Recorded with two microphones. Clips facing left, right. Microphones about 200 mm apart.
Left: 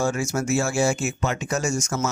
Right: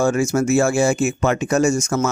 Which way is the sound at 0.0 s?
55° right (ahead or behind).